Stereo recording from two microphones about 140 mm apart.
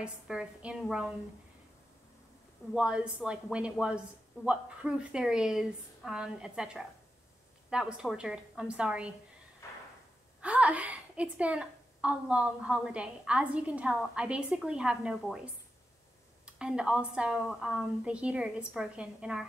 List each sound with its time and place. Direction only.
0.0 s a woman's voice: 5° right (ahead or behind)
2.7 s a woman's voice: 5° right (ahead or behind)
9.6 s a sound: 20° left (ahead or behind)
10.4 s a woman's voice: 10° right (ahead or behind)